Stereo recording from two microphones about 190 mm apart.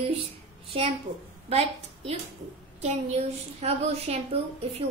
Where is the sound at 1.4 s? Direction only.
30° right (ahead or behind).